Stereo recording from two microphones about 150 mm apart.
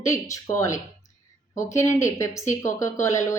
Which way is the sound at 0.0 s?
20° left (ahead or behind).